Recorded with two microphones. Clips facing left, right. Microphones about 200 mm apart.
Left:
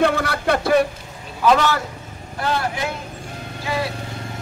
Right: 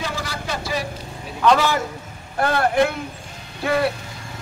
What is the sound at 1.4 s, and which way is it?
Speech, 10° left (ahead or behind).